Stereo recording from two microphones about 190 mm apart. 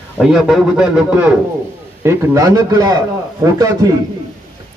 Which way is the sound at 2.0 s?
20° right (ahead or behind).